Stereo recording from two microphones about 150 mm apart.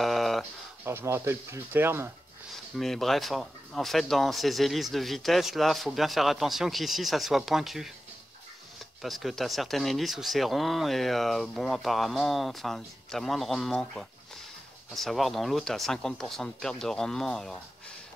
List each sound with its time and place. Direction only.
0.0 s a sound: centre (ahead or behind)
0.8 s speech: 15° right (ahead or behind)
2.5 s speech: centre (ahead or behind)
9.0 s speech: centre (ahead or behind)